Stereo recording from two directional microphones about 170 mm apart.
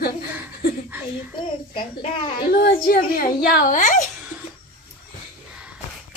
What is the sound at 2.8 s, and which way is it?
A child's voice, 60° left (ahead or behind).